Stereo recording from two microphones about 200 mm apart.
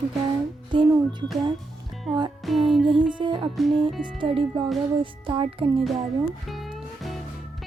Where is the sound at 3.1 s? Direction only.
25° right (ahead or behind).